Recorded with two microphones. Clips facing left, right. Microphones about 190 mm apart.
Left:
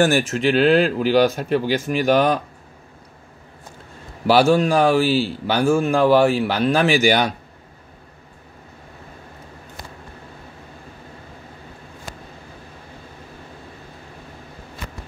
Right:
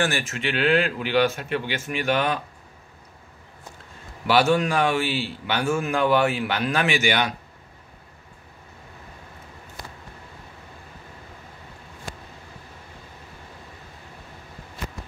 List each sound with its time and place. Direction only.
0.0 s a man's voice: 40° left (ahead or behind)
4.3 s a man's voice: 30° left (ahead or behind)